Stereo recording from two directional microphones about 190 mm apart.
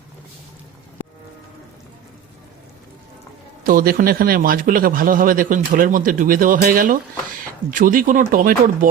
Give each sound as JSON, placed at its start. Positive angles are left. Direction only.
{"t": 3.6, "sound": "a man's voice", "side_deg": -50}